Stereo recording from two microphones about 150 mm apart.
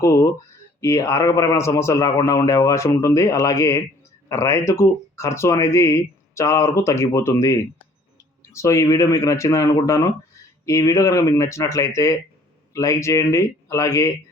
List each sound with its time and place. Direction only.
0.0 s speech: 20° left (ahead or behind)